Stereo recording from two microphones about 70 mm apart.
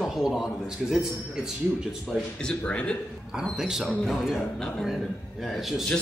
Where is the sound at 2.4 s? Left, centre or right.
Centre.